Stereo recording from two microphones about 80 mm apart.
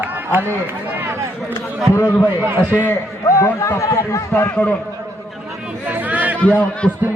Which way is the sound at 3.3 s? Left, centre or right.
Left.